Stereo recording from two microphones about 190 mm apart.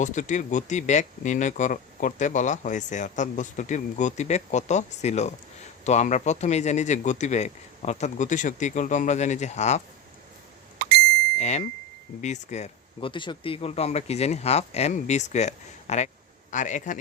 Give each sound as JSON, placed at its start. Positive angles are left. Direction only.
{"t": 0.0, "sound": "speech", "side_deg": 40}
{"t": 11.3, "sound": "bicycle bell", "side_deg": 35}
{"t": 12.2, "sound": "speech", "side_deg": 40}